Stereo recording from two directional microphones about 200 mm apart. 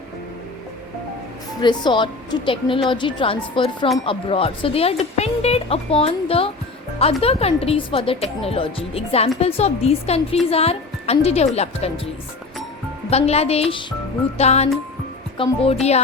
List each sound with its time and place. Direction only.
1.6 s speech: 20° left (ahead or behind)